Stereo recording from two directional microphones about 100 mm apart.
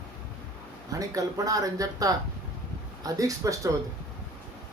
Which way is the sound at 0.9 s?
35° right (ahead or behind).